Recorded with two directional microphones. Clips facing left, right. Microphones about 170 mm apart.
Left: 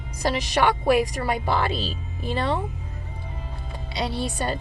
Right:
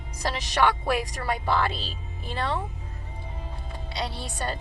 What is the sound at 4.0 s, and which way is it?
Speech, 10° left (ahead or behind).